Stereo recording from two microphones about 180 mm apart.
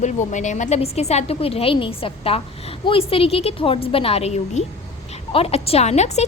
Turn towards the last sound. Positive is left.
turn(degrees=40)  # may be behind; listen again after turning